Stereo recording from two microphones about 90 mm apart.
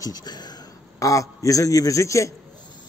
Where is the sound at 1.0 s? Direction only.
40° left (ahead or behind).